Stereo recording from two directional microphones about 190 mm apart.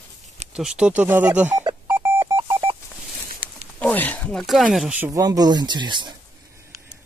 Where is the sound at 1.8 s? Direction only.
10° right (ahead or behind).